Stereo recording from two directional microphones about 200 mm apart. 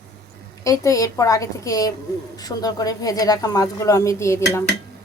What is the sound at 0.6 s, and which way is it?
Speech, 15° left (ahead or behind).